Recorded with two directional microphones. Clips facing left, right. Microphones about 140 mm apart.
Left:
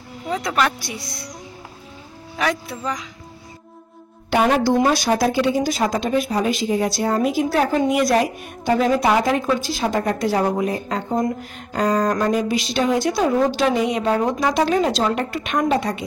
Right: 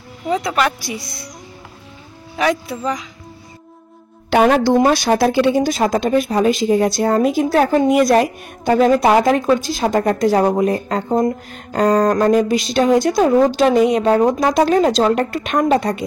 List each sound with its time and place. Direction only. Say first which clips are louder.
0.3 s speech: right 3 dB; centre (ahead or behind)
2.3 s speech: right 5 dB; centre (ahead or behind)
4.3 s a woman's voice: right 4 dB; 70° right (ahead or behind); by 16.1 s 45° right (ahead or behind)